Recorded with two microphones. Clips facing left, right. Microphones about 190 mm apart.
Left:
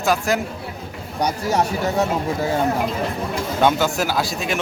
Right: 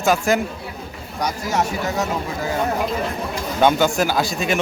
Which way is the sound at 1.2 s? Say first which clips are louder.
Left 2 dB; 30° left (ahead or behind).